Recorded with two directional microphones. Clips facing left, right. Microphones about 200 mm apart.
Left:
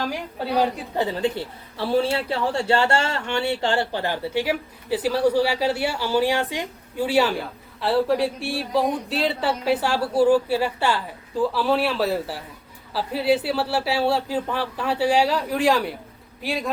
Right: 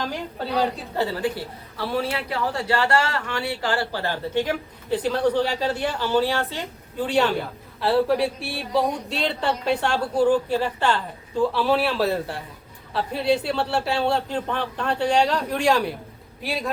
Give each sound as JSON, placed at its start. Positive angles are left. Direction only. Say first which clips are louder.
{"t": 0.0, "sound": "speech", "louder": "left 1 dB", "side_deg": 10}
{"t": 0.9, "sound": "a woman's voice", "louder": "left 2 dB", "side_deg": 25}